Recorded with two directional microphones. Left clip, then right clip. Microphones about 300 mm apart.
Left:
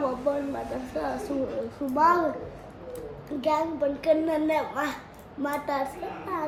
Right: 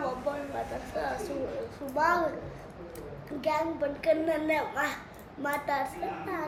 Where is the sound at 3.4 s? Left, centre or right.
Centre.